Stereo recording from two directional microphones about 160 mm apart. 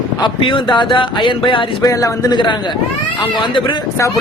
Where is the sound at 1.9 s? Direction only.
20° left (ahead or behind).